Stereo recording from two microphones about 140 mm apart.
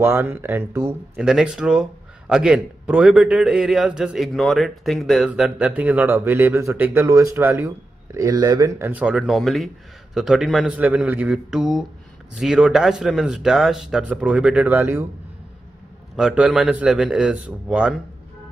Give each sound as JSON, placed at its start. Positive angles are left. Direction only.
{"t": 0.0, "sound": "a man's voice", "side_deg": -15}
{"t": 1.1, "sound": "a man's voice", "side_deg": -5}
{"t": 16.2, "sound": "a man's voice", "side_deg": -5}